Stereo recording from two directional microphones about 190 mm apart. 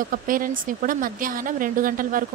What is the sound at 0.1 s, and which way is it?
Speech, 45° right (ahead or behind).